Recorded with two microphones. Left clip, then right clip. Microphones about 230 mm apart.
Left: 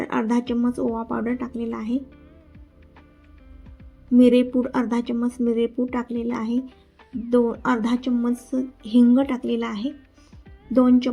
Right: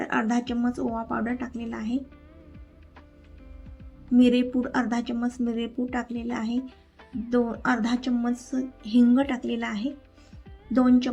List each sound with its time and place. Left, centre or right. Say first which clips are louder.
0.0 s speech: left 2 dB; centre
4.1 s speech: left 5 dB; centre